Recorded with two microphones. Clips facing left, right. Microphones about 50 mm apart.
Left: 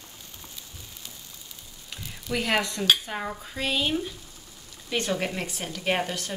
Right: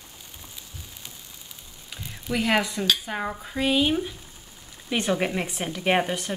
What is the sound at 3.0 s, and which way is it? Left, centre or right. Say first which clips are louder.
Speech: right 3 dB; centre.